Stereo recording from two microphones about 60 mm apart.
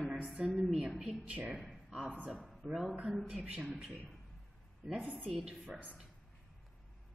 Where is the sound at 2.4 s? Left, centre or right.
Centre.